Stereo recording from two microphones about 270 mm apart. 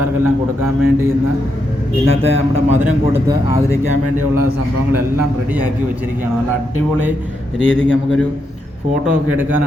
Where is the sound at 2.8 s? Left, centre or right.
Centre.